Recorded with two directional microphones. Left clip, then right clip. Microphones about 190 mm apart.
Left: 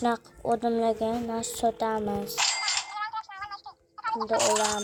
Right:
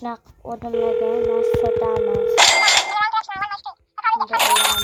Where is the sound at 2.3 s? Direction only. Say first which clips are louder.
Right 15 dB; 50° right (ahead or behind).